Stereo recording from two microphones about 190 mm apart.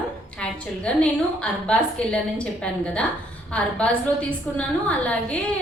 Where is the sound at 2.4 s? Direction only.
5° left (ahead or behind).